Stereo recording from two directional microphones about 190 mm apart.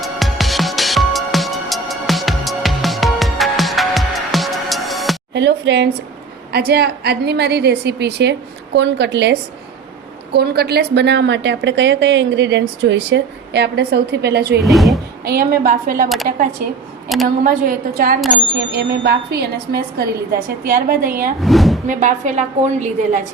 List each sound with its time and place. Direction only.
0.0 s music: centre (ahead or behind)
5.3 s a woman's voice: 65° right (ahead or behind)
14.6 s speech: centre (ahead or behind)
15.2 s a woman's voice: 55° right (ahead or behind)
18.5 s a woman's voice: 60° right (ahead or behind)
21.4 s speech: centre (ahead or behind)
21.8 s a woman's voice: 40° right (ahead or behind)